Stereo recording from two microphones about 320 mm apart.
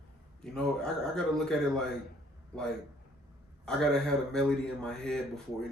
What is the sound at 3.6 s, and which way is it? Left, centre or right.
A man's voice, centre.